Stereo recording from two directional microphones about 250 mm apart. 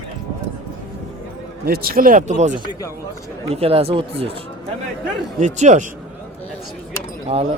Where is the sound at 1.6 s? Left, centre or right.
Right.